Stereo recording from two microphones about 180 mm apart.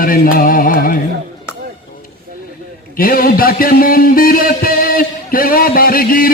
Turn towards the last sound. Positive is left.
turn(degrees=55)  # may be behind; listen again after turning